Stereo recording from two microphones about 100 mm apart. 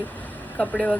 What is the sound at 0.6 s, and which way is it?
Speech, 10° left (ahead or behind).